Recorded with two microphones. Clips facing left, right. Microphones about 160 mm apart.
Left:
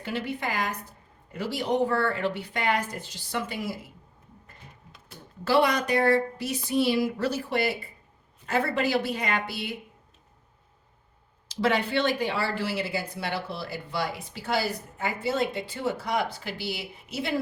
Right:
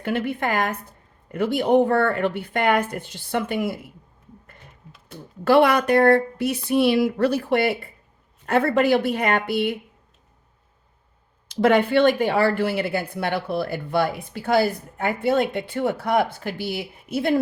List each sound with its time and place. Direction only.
0.0 s speech: 55° right (ahead or behind)
5.5 s speech: 60° right (ahead or behind)
11.4 s speech: 55° right (ahead or behind)